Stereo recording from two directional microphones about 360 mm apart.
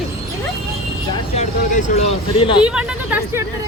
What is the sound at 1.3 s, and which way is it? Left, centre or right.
Speech, left.